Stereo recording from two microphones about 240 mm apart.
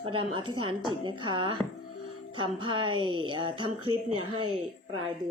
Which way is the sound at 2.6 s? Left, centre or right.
Right.